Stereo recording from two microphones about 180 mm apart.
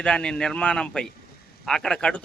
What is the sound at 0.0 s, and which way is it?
A man's voice, 5° left (ahead or behind).